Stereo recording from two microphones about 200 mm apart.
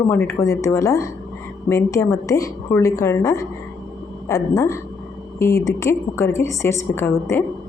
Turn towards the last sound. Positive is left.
turn(degrees=15)  # may be behind; listen again after turning